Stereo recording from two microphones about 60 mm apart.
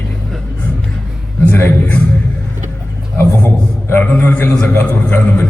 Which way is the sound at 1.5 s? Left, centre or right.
Left.